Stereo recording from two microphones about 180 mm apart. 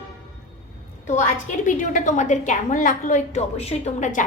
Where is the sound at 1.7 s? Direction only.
45° left (ahead or behind).